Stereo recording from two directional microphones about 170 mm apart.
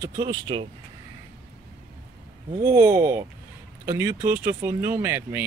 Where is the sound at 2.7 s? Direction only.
15° right (ahead or behind).